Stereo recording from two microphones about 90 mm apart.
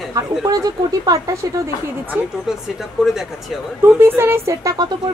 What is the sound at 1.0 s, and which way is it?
Speech, 40° right (ahead or behind).